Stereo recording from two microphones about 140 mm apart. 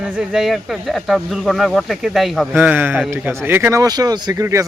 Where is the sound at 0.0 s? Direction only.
5° right (ahead or behind).